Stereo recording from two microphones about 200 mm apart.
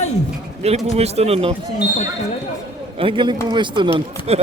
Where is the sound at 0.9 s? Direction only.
30° right (ahead or behind).